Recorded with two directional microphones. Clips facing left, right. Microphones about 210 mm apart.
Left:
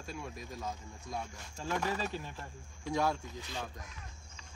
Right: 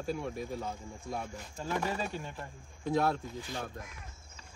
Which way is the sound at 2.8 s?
55° right (ahead or behind).